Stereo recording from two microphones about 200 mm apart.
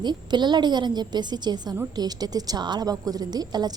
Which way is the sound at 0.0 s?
20° right (ahead or behind).